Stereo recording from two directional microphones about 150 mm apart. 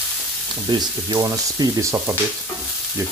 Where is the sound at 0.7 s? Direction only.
30° right (ahead or behind).